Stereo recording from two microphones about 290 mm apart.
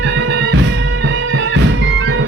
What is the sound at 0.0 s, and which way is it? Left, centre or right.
Music, right.